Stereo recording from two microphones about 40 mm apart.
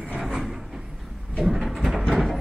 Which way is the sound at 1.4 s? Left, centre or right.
Centre.